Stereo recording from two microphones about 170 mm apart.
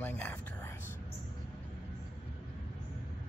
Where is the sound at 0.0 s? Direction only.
10° left (ahead or behind).